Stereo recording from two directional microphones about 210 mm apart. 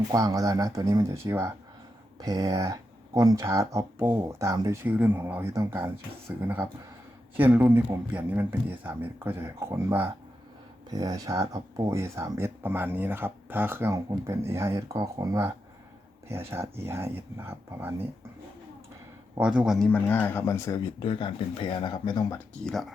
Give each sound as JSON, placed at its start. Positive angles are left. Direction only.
{"t": 0.1, "sound": "speech", "side_deg": -15}
{"t": 19.4, "sound": "speech", "side_deg": -5}
{"t": 22.6, "sound": "speech", "side_deg": 0}